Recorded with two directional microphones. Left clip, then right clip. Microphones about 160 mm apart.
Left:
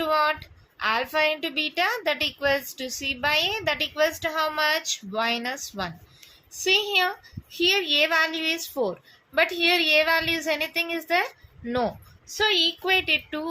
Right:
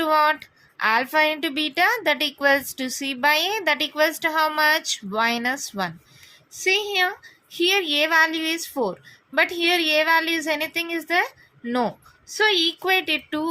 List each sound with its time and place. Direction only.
0.0 s speech: 45° right (ahead or behind)
6.7 s a woman's voice: 35° right (ahead or behind)